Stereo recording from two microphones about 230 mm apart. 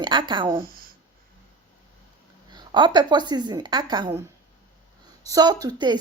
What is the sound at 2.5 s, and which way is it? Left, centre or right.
A woman's voice, centre.